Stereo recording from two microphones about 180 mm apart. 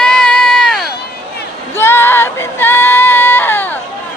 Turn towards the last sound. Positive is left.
turn(degrees=10)  # may be behind; listen again after turning